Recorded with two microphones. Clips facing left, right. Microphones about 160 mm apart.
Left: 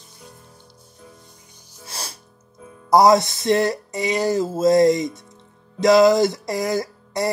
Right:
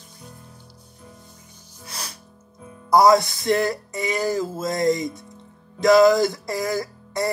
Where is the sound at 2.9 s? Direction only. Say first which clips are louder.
Left 1 dB; 20° left (ahead or behind).